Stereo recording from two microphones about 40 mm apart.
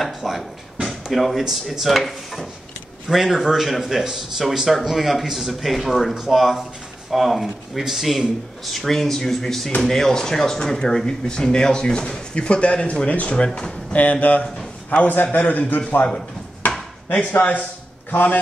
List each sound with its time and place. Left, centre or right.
0.0 s a sound: centre
0.8 s drawer open or close: centre
1.5 s speech: centre
6.1 s speech: centre
8.7 s speech: centre
12.4 s speech: left
17.1 s a man's voice: left